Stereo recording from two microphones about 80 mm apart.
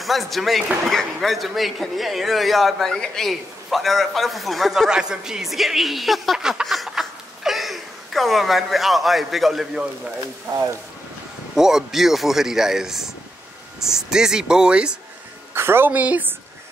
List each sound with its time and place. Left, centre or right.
0.0 s a man's voice: centre
11.5 s a man's voice: centre
15.5 s a woman's voice: right
15.9 s speech: centre